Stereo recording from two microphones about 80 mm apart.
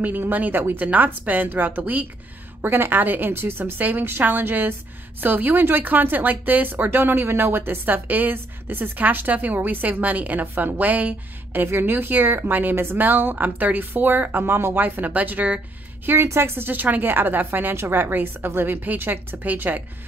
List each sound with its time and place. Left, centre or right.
0.0 s speech: right
16.1 s speech: right